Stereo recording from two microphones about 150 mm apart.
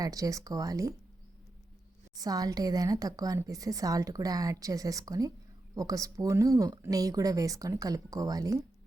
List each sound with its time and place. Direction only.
0.0 s a woman's voice: 25° right (ahead or behind)
2.1 s a woman's voice: 25° right (ahead or behind)